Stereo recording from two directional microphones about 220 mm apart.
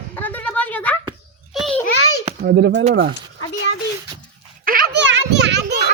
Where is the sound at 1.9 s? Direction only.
80° left.